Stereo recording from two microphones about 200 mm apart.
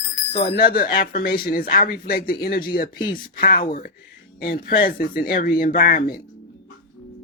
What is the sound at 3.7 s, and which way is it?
Speech, 45° left (ahead or behind).